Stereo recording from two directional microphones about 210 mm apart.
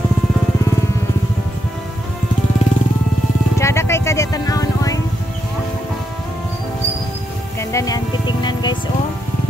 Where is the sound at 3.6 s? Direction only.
15° left (ahead or behind).